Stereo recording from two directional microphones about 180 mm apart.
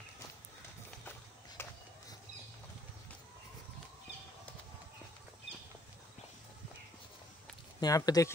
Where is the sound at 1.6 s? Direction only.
15° left (ahead or behind).